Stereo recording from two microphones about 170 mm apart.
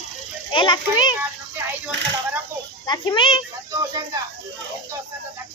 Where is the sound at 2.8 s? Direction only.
25° left (ahead or behind).